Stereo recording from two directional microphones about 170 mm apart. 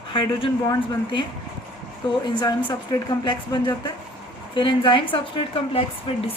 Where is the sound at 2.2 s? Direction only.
25° left (ahead or behind).